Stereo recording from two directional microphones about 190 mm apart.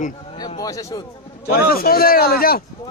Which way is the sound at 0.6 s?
20° left (ahead or behind).